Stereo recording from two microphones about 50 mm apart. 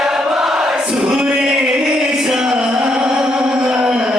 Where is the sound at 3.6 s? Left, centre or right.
Right.